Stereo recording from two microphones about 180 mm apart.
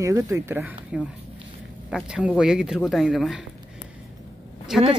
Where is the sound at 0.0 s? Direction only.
15° right (ahead or behind); by 3.4 s centre (ahead or behind).